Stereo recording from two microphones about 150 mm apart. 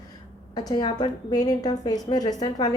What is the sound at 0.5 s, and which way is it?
A woman's voice, 25° left (ahead or behind).